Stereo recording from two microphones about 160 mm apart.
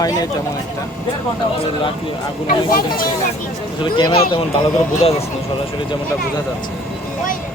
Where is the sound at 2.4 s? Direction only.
65° left (ahead or behind).